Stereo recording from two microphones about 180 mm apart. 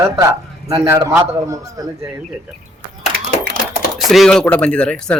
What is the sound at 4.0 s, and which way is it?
A man's voice, centre (ahead or behind).